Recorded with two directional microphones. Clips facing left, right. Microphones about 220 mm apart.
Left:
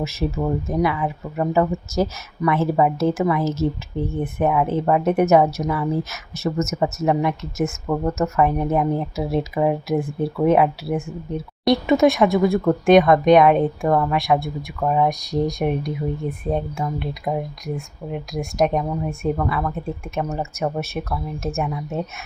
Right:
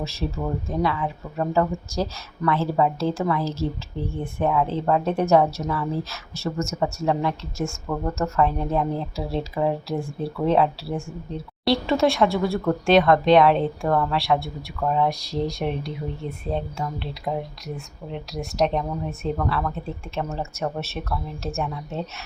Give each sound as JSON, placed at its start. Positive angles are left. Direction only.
{"t": 0.0, "sound": "a woman's voice", "side_deg": 20}